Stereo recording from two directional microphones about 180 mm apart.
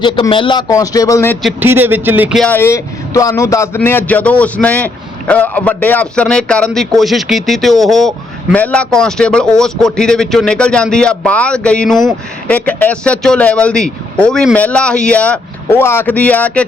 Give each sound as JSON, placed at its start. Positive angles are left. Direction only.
{"t": 0.0, "sound": "speech", "side_deg": 25}
{"t": 1.5, "sound": "speech", "side_deg": -10}
{"t": 2.4, "sound": "a man's voice", "side_deg": 10}